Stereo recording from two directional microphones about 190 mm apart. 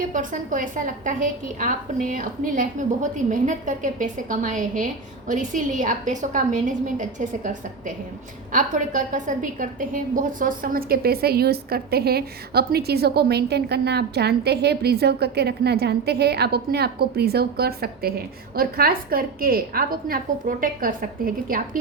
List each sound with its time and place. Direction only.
0.1 s a woman's voice: 45° right (ahead or behind)